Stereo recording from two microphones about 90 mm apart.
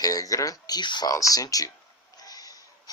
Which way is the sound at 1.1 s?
40° left (ahead or behind).